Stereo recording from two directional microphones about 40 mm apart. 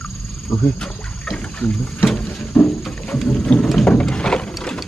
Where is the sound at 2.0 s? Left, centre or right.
Centre.